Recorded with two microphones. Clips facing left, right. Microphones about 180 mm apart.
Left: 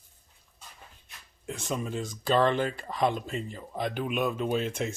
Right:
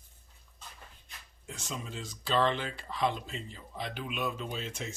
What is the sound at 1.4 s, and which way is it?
Speech, 60° left (ahead or behind).